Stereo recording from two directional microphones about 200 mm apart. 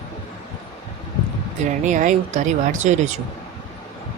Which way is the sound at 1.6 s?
40° right (ahead or behind).